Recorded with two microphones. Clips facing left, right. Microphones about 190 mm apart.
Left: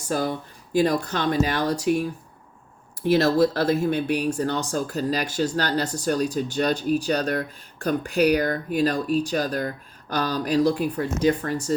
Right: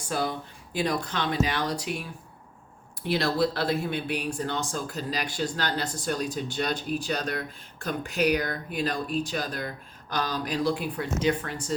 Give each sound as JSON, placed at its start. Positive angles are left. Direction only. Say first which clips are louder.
{"t": 0.0, "sound": "speech", "louder": "left 4 dB", "side_deg": 40}
{"t": 3.1, "sound": "speech", "louder": "left 7 dB", "side_deg": 45}